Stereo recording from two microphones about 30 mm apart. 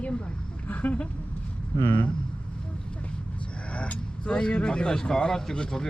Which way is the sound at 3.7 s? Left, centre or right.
Left.